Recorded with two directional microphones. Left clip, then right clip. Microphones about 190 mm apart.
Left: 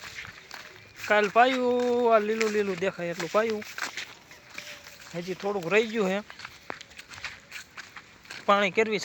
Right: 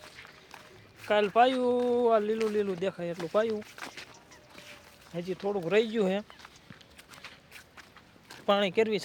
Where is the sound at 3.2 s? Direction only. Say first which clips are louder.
Left 2 dB; 30° left (ahead or behind).